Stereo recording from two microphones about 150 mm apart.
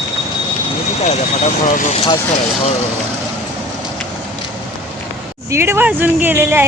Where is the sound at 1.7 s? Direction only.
60° left (ahead or behind).